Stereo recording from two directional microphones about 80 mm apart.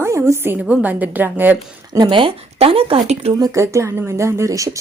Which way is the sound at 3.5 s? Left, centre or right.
Right.